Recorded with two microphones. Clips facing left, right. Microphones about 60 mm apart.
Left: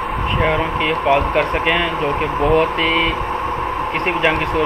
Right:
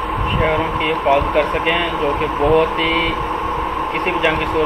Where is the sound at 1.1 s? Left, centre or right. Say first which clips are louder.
Right 1 dB; left.